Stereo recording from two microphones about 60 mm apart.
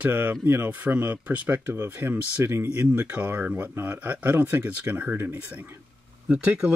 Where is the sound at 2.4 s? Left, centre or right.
Right.